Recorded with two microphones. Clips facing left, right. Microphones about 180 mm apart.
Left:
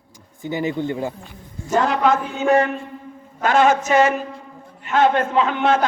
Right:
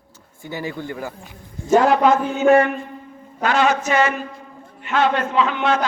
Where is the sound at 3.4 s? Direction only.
50° left (ahead or behind).